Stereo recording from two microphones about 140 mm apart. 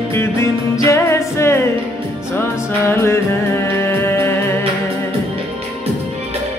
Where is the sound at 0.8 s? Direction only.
20° left (ahead or behind).